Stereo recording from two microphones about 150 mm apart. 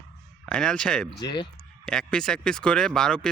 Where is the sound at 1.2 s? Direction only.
30° left (ahead or behind).